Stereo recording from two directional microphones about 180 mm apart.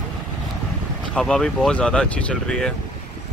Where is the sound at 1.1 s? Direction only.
5° left (ahead or behind).